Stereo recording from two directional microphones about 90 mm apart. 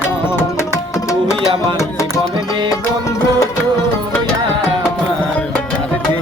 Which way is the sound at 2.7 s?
40° left (ahead or behind).